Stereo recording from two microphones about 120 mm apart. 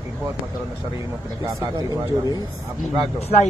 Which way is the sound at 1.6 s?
30° right (ahead or behind).